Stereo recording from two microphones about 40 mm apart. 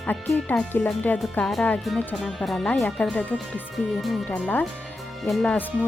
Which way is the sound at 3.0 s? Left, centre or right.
Left.